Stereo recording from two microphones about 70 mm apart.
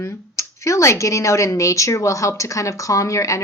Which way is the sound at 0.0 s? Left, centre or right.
Left.